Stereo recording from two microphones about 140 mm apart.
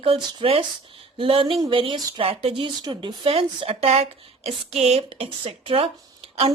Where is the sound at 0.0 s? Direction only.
35° right (ahead or behind).